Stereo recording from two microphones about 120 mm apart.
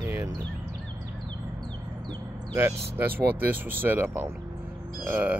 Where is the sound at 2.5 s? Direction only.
20° right (ahead or behind).